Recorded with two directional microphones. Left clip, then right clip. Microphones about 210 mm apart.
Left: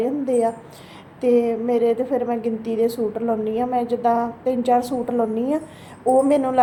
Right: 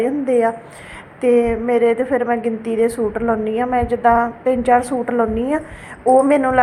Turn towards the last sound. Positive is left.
turn(degrees=-5)  # may be behind; listen again after turning